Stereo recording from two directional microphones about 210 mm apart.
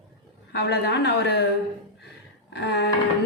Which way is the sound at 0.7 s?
50° left (ahead or behind).